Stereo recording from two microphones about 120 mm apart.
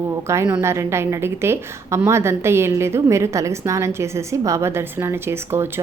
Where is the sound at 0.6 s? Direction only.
25° right (ahead or behind).